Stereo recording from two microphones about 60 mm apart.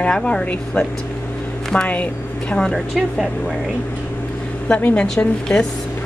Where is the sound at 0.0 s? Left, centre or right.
Centre.